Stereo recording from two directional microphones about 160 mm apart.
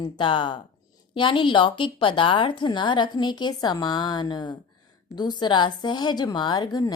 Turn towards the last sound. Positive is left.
turn(degrees=25)  # may be behind; listen again after turning